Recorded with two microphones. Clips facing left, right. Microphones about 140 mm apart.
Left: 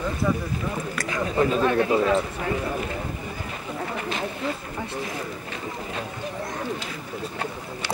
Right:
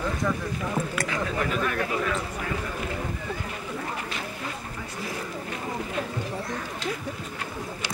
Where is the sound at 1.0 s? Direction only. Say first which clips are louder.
Left 5 dB; 25° left (ahead or behind).